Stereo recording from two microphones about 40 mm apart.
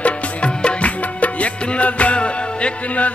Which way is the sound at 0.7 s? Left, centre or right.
Left.